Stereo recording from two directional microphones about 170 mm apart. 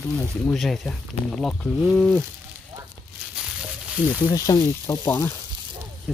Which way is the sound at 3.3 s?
5° right (ahead or behind).